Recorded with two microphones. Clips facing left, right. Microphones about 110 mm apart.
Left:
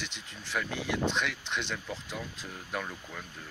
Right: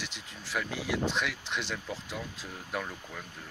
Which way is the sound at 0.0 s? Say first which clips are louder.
Even; 5° right (ahead or behind).